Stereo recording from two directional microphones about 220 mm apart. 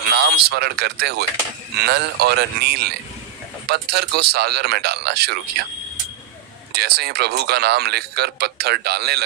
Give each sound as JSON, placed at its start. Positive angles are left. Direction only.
{"t": 0.1, "sound": "speech", "side_deg": -50}
{"t": 6.7, "sound": "speech", "side_deg": -45}